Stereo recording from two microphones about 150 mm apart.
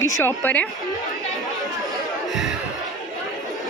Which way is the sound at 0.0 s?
15° left (ahead or behind).